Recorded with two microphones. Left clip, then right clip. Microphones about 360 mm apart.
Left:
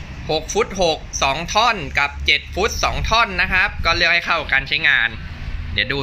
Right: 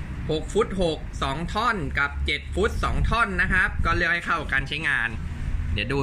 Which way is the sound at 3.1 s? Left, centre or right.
Centre.